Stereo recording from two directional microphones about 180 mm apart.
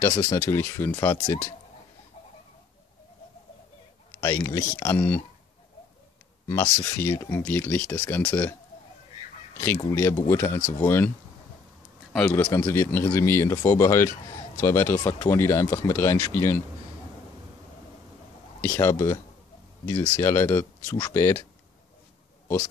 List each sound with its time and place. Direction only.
0.0 s speech: 15° left (ahead or behind)
4.2 s speech: 20° left (ahead or behind)
6.4 s speech: 15° left (ahead or behind)
9.8 s speech: 15° left (ahead or behind)
12.1 s speech: 5° left (ahead or behind)
18.6 s speech: 15° left (ahead or behind)